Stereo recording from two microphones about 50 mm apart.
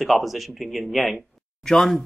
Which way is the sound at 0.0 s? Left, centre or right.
Centre.